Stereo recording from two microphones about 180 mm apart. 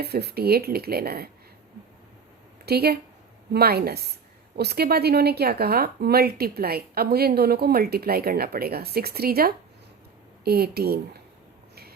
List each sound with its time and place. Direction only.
0.0 s speech: 60° right (ahead or behind)
2.6 s speech: 60° right (ahead or behind)
11.7 s a sound: 60° right (ahead or behind)